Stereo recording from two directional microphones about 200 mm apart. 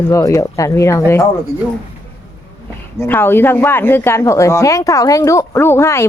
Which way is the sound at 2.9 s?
10° left (ahead or behind).